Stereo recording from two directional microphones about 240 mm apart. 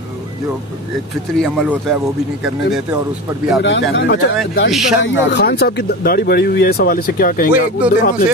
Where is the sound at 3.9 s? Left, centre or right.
Left.